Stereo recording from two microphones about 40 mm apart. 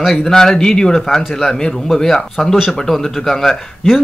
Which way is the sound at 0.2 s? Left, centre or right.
Centre.